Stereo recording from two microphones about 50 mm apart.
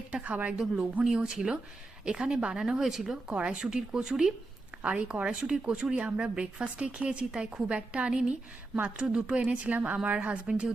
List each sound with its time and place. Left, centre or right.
0.1 s speech: right
2.8 s speech: centre
3.2 s speech: right
4.8 s speech: right
9.5 s speech: right